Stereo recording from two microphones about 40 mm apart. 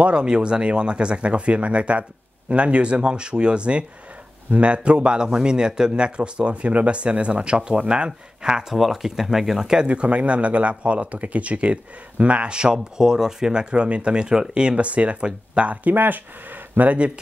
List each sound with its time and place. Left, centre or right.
0.0 s speech: right
8.7 s speech: centre
9.8 s speech: right
14.8 s speech: right
15.9 s speech: right
16.7 s speech: right